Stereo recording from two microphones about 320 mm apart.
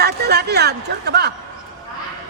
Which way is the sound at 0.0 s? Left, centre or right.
Right.